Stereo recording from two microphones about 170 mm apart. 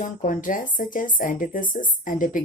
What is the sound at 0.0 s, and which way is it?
Speech, 50° left (ahead or behind).